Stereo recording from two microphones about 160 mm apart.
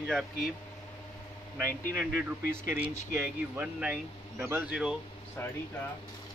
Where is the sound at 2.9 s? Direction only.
20° right (ahead or behind).